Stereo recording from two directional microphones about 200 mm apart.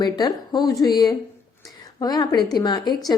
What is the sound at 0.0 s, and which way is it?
A woman's voice, 20° left (ahead or behind).